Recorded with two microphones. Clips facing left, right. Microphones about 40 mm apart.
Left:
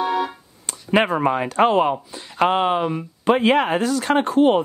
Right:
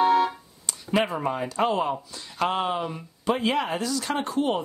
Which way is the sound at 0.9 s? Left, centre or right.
Left.